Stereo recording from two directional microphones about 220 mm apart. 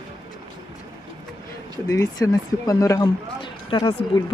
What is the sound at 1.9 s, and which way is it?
A woman's voice, 15° left (ahead or behind).